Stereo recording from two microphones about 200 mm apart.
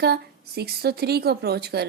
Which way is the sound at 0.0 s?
55° right (ahead or behind).